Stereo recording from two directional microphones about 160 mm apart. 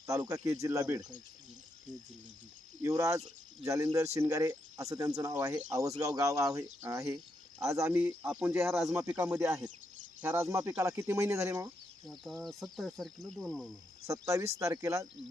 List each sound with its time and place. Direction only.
0.1 s speech: 20° right (ahead or behind)
2.8 s speech: 20° right (ahead or behind)
12.0 s speech: centre (ahead or behind)
14.1 s speech: 20° right (ahead or behind)